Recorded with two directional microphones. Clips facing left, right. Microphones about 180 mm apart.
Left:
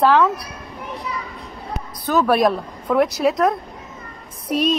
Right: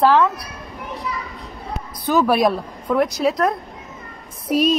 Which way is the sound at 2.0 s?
5° right (ahead or behind).